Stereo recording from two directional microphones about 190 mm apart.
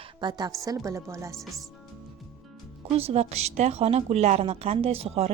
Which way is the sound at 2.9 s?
30° right (ahead or behind).